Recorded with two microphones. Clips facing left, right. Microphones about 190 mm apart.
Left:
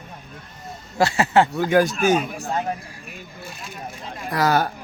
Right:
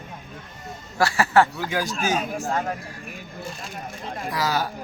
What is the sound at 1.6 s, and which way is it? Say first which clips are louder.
Speech: left 8 dB; 55° left (ahead or behind).